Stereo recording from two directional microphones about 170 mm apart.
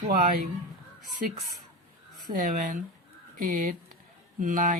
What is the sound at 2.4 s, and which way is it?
Speech, 50° right (ahead or behind).